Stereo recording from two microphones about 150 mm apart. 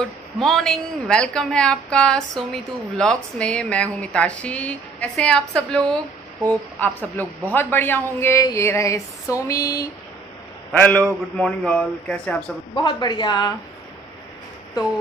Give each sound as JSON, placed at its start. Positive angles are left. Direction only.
{"t": 0.0, "sound": "a woman's voice", "side_deg": 5}
{"t": 10.7, "sound": "a man's voice", "side_deg": 10}
{"t": 12.7, "sound": "a woman's voice", "side_deg": 30}